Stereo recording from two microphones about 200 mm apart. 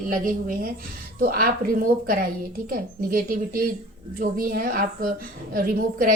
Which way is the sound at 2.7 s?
45° right (ahead or behind).